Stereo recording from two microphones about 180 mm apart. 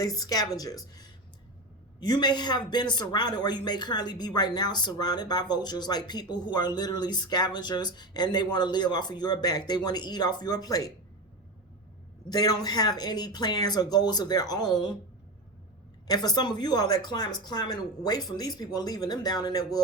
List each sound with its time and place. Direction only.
0.0 s a man's voice: 20° left (ahead or behind)
12.3 s a man's voice: 20° left (ahead or behind)
16.0 s a man's voice: 20° left (ahead or behind)